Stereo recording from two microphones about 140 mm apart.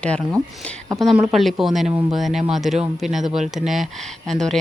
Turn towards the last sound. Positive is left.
turn(degrees=5)  # may be behind; listen again after turning